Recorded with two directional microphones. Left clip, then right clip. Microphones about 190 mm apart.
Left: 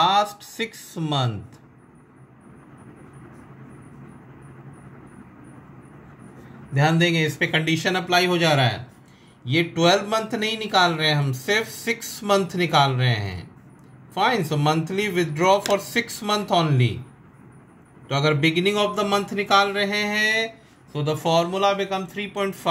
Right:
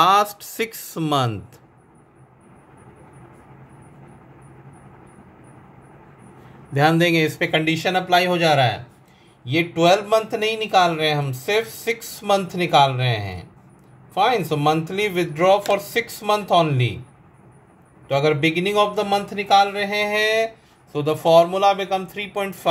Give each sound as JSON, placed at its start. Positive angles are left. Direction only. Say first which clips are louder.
{"t": 0.0, "sound": "speech", "louder": "right 3 dB", "side_deg": -35}
{"t": 6.7, "sound": "speech", "louder": "right 4 dB", "side_deg": -30}
{"t": 9.5, "sound": "speech", "louder": "right 2 dB", "side_deg": -20}
{"t": 14.5, "sound": "speech", "louder": "right 3 dB", "side_deg": -20}
{"t": 18.0, "sound": "speech", "louder": "right 2 dB", "side_deg": -10}
{"t": 20.1, "sound": "speech", "louder": "right 2 dB", "side_deg": -25}